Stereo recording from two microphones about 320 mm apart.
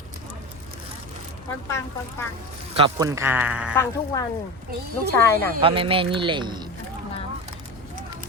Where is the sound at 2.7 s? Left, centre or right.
Centre.